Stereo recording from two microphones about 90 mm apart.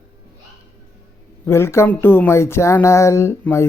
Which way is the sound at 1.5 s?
30° left (ahead or behind).